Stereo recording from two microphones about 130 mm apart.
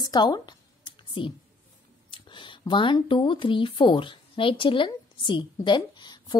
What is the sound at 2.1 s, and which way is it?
Speech, 40° left (ahead or behind).